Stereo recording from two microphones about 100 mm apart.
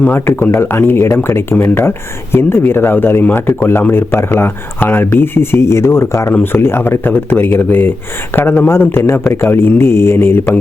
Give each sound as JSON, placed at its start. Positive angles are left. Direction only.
{"t": 0.0, "sound": "speech", "side_deg": 20}